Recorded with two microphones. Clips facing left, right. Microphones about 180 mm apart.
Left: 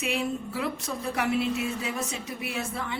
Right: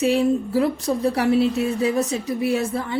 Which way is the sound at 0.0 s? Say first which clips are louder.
Right 11 dB; 35° right (ahead or behind).